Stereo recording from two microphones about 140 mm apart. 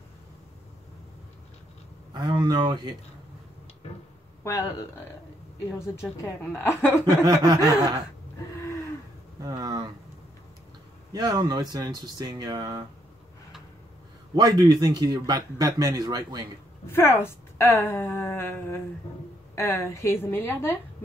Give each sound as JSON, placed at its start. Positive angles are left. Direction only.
{"t": 2.1, "sound": "speech", "side_deg": -30}
{"t": 4.4, "sound": "speech", "side_deg": 25}
{"t": 6.2, "sound": "a woman's voice", "side_deg": 15}
{"t": 7.2, "sound": "speech", "side_deg": -25}
{"t": 9.4, "sound": "a sound", "side_deg": -25}
{"t": 11.1, "sound": "speech", "side_deg": -30}
{"t": 14.3, "sound": "speech", "side_deg": -30}
{"t": 16.8, "sound": "a woman's voice", "side_deg": 15}